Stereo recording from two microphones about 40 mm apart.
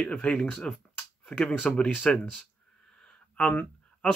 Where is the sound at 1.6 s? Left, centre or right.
Left.